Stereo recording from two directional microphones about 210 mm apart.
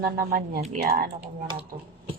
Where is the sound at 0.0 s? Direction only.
45° right (ahead or behind).